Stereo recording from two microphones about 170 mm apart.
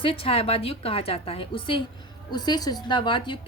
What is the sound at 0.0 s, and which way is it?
A woman's voice, 30° left (ahead or behind).